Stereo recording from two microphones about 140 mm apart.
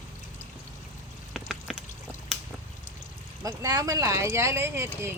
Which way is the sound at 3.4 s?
25° right (ahead or behind).